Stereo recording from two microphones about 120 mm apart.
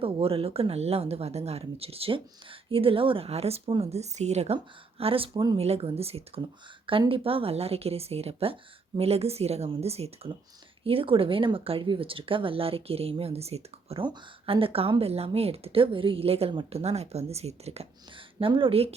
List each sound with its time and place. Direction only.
0.0 s speech: 50° right (ahead or behind)
3.9 s speech: 70° right (ahead or behind); by 5.5 s 35° right (ahead or behind)
5.5 s speech: 55° right (ahead or behind)
14.0 s speech: 45° right (ahead or behind); by 17.8 s 60° right (ahead or behind)
18.3 s speech: 45° right (ahead or behind)